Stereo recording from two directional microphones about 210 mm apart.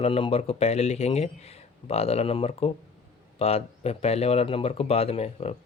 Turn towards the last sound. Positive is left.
turn(degrees=30)  # may be behind; listen again after turning